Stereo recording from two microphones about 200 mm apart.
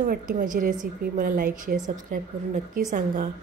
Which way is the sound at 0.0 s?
45° right (ahead or behind).